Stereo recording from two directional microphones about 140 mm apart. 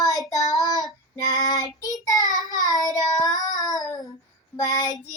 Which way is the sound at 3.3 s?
25° left (ahead or behind).